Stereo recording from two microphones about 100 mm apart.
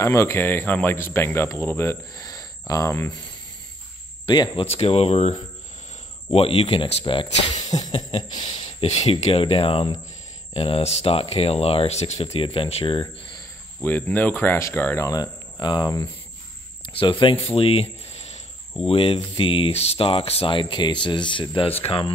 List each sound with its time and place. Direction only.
0.0 s speech: 30° left (ahead or behind)
2.1 s a sound: 40° left (ahead or behind)
2.7 s speech: 30° left (ahead or behind)
4.3 s speech: 55° left (ahead or behind)
4.6 s speech: 90° left
6.3 s speech: 85° left
8.2 s speech: 45° left (ahead or behind)
8.5 s speech: 90° left; by 9.8 s 70° left (ahead or behind)
10.5 s speech: 90° left; by 13.1 s 60° left (ahead or behind)
13.8 s speech: 20° left (ahead or behind)
15.0 s cricket: 45° left (ahead or behind)
17.0 s speech: 60° left (ahead or behind); by 18.4 s 90° left
18.9 s speech: 70° left (ahead or behind)